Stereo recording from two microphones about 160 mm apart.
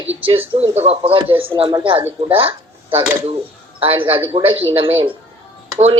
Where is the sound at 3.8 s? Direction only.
35° right (ahead or behind).